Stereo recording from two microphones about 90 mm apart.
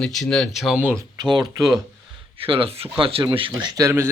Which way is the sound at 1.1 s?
55° right (ahead or behind).